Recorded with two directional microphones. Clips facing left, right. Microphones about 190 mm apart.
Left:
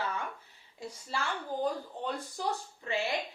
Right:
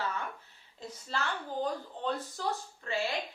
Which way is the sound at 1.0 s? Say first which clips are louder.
Even; 10° left (ahead or behind).